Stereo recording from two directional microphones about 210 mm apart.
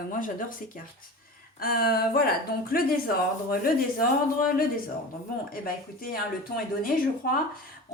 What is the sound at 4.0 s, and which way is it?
A woman's voice, 40° left (ahead or behind).